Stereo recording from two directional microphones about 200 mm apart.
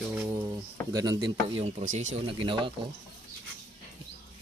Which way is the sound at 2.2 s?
25° right (ahead or behind).